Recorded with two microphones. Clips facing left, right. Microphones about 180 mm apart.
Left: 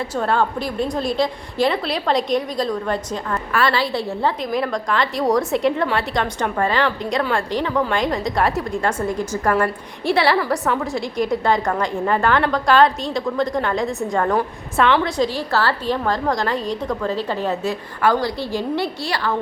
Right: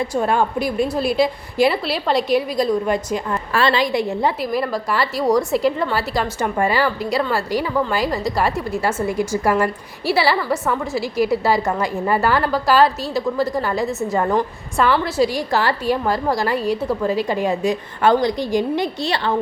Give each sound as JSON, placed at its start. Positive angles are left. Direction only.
{"t": 0.0, "sound": "a woman's voice", "side_deg": -10}
{"t": 3.5, "sound": "a woman's voice", "side_deg": -25}
{"t": 4.5, "sound": "a woman's voice", "side_deg": -5}